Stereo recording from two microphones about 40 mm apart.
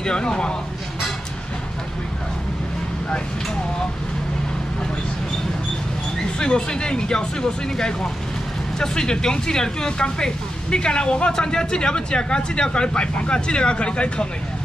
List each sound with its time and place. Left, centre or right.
0.0 s speech: left
6.3 s speech: centre